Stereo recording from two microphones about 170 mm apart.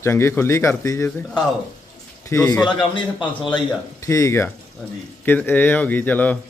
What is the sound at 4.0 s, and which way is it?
A man's voice, 20° left (ahead or behind).